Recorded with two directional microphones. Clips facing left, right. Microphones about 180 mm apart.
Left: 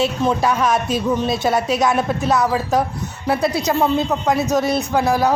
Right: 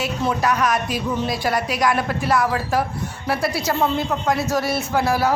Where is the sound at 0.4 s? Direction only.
25° left (ahead or behind).